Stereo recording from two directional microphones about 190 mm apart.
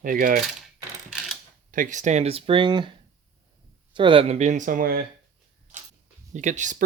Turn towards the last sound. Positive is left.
turn(degrees=-40)  # may be behind; listen again after turning